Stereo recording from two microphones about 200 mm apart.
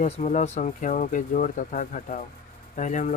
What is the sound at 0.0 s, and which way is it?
Speech, 35° left (ahead or behind).